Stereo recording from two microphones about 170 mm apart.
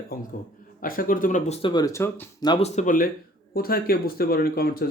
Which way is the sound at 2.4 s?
25° left (ahead or behind).